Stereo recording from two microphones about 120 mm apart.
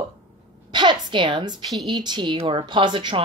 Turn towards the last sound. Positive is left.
turn(degrees=-40)  # may be behind; listen again after turning